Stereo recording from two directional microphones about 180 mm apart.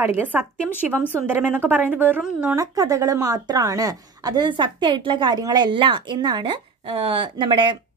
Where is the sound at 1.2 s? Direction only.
10° right (ahead or behind).